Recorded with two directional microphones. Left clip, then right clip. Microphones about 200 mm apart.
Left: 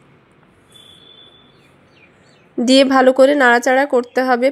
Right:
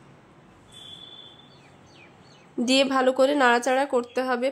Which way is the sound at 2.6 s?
30° left (ahead or behind).